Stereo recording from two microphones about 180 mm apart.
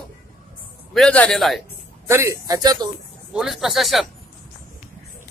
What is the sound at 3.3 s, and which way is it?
Speech, centre (ahead or behind).